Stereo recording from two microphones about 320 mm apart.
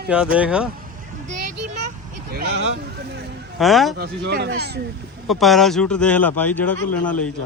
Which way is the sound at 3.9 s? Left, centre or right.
Right.